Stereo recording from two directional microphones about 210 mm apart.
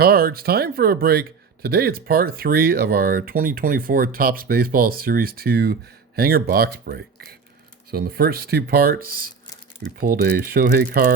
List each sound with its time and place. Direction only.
0.0 s speech: 45° right (ahead or behind)